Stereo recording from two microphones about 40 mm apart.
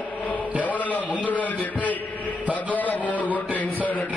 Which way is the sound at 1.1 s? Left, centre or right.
Left.